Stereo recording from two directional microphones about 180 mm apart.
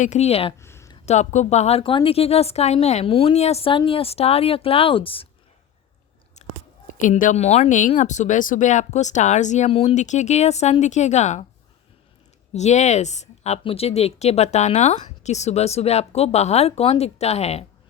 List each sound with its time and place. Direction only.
0.0 s speech: 40° left (ahead or behind)
0.6 s a sound: 15° left (ahead or behind)
1.0 s speech: 40° left (ahead or behind)
6.3 s speech: 45° left (ahead or behind)
12.5 s speech: 40° left (ahead or behind)